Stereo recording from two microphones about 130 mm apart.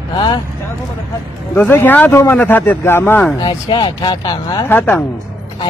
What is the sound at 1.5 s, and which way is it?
Speech, 15° left (ahead or behind).